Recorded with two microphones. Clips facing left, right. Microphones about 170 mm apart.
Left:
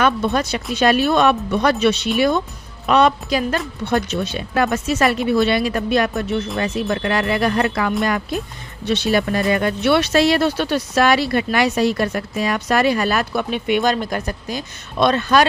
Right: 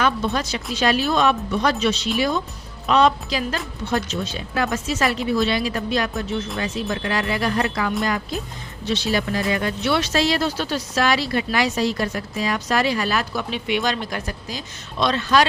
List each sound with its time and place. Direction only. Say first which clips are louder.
0.0 s speech: left 4 dB; 60° left (ahead or behind)